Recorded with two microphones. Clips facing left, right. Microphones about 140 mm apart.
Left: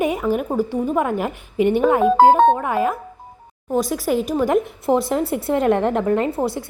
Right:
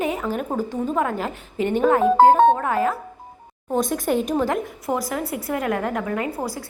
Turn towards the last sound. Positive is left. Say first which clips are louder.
# left 5 dB
turn(degrees=25)  # may be behind; listen again after turning